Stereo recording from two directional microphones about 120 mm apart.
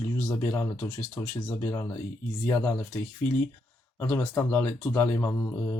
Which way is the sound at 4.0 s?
20° left (ahead or behind).